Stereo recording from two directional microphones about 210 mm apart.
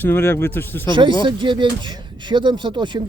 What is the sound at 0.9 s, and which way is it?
Speech, 20° right (ahead or behind).